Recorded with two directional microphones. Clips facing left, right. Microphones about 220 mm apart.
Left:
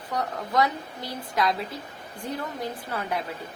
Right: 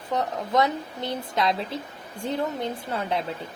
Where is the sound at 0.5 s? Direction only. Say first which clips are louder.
Right 2 dB; 25° right (ahead or behind).